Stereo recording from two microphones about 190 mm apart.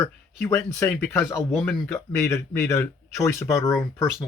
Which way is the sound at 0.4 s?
10° left (ahead or behind).